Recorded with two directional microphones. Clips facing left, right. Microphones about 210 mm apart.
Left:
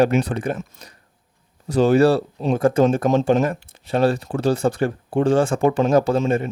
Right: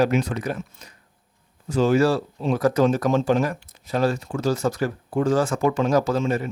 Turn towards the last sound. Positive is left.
turn(degrees=25)  # may be behind; listen again after turning